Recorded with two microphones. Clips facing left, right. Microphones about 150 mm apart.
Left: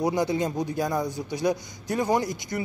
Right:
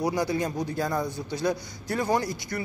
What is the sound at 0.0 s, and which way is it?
A man's voice, 20° left (ahead or behind).